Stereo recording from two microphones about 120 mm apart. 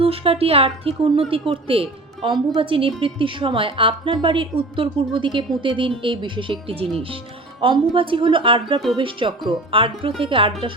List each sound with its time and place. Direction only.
0.0 s a woman's voice: 50° right (ahead or behind)